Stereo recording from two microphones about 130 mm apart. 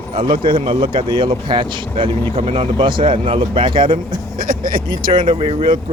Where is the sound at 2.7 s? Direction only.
40° right (ahead or behind).